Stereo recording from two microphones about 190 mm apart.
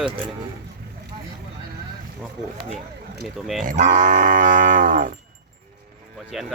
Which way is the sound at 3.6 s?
45° right (ahead or behind).